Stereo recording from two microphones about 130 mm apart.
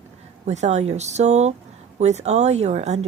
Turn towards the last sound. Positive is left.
turn(degrees=-60)  # may be behind; listen again after turning